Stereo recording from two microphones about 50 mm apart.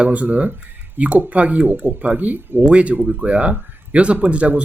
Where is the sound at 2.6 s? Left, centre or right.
Right.